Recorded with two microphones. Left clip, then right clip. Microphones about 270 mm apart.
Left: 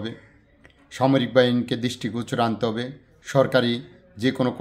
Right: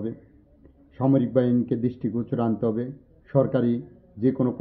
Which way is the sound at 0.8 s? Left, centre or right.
Centre.